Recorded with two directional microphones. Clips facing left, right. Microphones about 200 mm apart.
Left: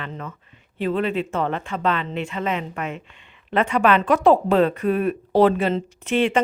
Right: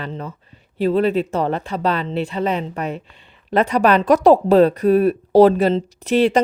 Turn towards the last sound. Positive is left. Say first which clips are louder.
# right 4 dB
turn(degrees=-40)  # may be behind; listen again after turning